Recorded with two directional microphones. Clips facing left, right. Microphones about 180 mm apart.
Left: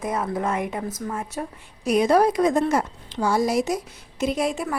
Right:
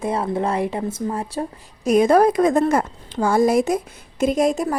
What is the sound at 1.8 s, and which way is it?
A woman's voice, 50° right (ahead or behind).